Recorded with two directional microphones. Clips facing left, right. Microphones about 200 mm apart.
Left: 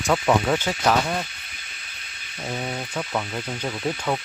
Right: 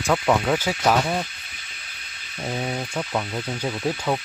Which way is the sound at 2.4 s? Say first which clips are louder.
Right 2 dB; 10° right (ahead or behind).